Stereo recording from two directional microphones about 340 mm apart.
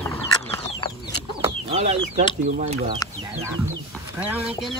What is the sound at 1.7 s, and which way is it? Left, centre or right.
Speech, centre.